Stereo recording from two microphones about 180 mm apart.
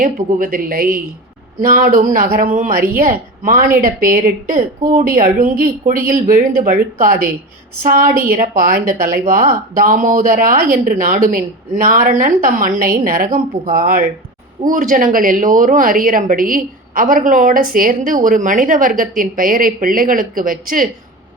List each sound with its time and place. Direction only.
0.0 s speech: 50° right (ahead or behind)